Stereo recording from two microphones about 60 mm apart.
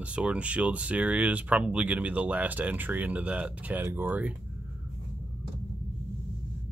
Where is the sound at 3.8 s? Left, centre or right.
Right.